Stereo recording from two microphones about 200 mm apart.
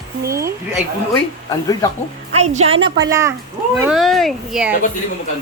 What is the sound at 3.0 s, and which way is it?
Speech, 15° right (ahead or behind).